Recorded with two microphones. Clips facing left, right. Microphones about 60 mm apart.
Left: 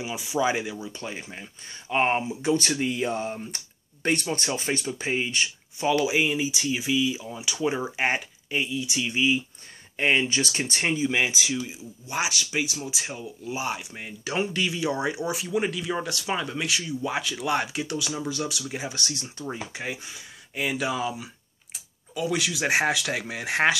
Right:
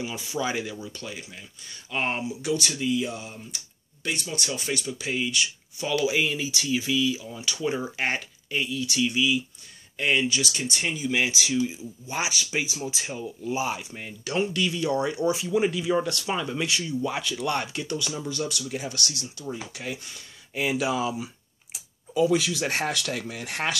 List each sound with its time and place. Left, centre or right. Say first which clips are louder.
0.0 s speech: left 4 dB; centre; by 5.9 s left
6.0 s speech: left 1 dB; centre
9.1 s speech: left 1 dB; left
11.1 s speech: right 4 dB; left
11.3 s speech: right 3 dB; centre
14.2 s speech: right 1 dB; left
19.2 s speech: even; left
19.7 s speech: left 1 dB; left
20.5 s speech: right 2 dB; centre